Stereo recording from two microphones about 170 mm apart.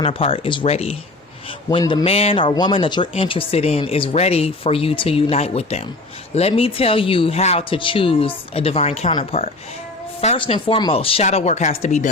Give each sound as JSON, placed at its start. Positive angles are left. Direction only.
{"t": 0.0, "sound": "speech", "side_deg": 30}
{"t": 1.8, "sound": "speech", "side_deg": 20}
{"t": 2.0, "sound": "speech", "side_deg": 35}